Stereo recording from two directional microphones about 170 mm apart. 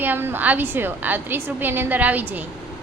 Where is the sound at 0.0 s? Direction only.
10° right (ahead or behind).